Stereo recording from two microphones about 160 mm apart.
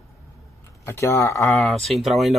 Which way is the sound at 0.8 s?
15° left (ahead or behind).